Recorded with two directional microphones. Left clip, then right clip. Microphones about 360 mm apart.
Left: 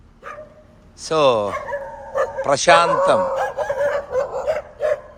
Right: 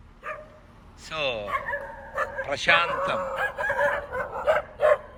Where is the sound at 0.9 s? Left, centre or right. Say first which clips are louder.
Left 13 dB; centre.